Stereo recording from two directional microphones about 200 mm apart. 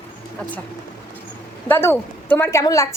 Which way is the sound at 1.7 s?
10° left (ahead or behind).